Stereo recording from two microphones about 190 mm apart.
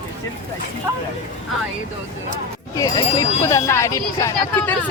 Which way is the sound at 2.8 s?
20° left (ahead or behind).